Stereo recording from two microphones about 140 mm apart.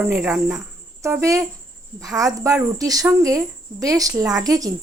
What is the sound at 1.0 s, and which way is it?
Speech, 20° right (ahead or behind).